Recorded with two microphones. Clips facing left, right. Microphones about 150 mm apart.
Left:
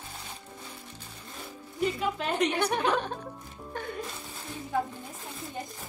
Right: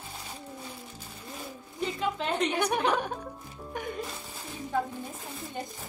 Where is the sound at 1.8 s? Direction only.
5° left (ahead or behind).